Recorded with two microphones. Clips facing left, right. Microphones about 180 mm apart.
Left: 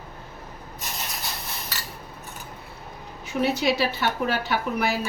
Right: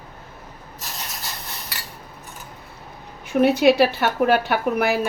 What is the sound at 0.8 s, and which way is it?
Rub, centre (ahead or behind).